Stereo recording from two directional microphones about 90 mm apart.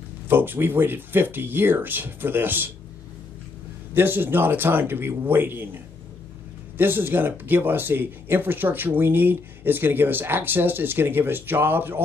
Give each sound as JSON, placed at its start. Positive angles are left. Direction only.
{"t": 0.3, "sound": "speech", "side_deg": -20}
{"t": 3.9, "sound": "speech", "side_deg": -25}
{"t": 6.8, "sound": "speech", "side_deg": -25}